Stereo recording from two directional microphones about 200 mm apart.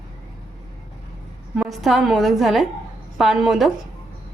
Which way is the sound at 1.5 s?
Centre (ahead or behind).